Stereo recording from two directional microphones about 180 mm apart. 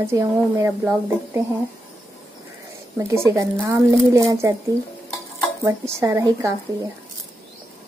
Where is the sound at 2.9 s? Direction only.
15° right (ahead or behind).